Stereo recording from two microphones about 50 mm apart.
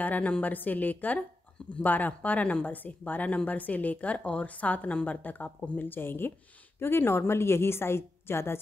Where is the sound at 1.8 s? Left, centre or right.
Left.